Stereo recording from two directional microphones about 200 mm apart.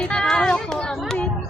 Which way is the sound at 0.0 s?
5° left (ahead or behind).